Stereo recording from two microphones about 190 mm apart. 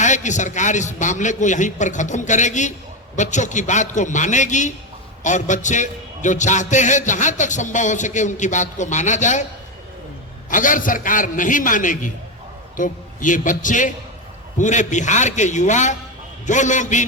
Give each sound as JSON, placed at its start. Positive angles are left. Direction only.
{"t": 0.0, "sound": "a man's voice", "side_deg": 40}
{"t": 10.5, "sound": "a man's voice", "side_deg": 45}